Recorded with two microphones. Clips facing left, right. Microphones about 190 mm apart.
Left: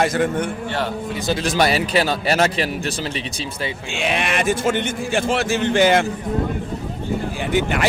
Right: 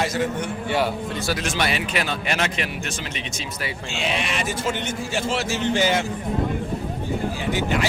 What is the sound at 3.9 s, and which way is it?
Speech, 55° left (ahead or behind).